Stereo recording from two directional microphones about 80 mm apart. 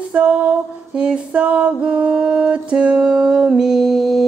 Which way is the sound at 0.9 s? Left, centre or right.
Centre.